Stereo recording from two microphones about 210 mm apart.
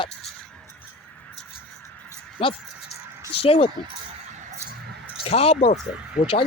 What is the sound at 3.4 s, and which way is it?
Speech, 25° left (ahead or behind).